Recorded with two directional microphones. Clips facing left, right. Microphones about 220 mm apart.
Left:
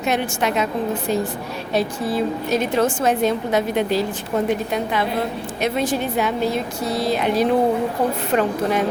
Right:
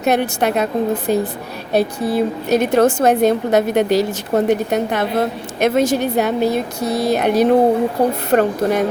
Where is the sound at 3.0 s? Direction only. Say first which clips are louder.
Right 5 dB; 60° right (ahead or behind).